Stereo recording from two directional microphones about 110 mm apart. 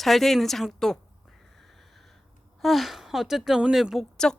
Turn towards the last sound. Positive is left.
turn(degrees=5)  # may be behind; listen again after turning